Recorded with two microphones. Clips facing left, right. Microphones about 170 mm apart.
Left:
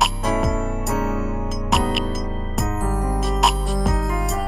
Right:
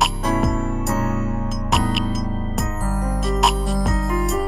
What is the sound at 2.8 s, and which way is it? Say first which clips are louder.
Music: left 1 dB; 20° left (ahead or behind).